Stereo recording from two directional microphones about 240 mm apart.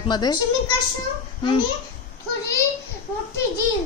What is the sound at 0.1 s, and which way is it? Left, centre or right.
Speech, centre.